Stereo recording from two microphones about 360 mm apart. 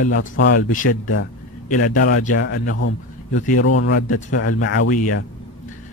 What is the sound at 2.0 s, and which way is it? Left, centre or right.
A man's voice, left.